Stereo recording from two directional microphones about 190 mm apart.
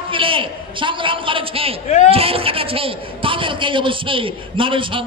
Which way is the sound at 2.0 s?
30° right (ahead or behind).